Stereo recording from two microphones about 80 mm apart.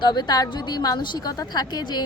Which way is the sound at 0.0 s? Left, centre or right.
Left.